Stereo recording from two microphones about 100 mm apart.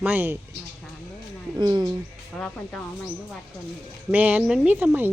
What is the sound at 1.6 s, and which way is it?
Speech, 45° right (ahead or behind).